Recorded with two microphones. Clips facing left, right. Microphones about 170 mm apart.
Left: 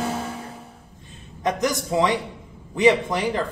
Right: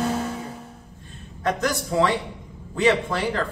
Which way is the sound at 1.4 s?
15° left (ahead or behind).